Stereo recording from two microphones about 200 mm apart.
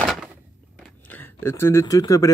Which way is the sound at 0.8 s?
10° left (ahead or behind).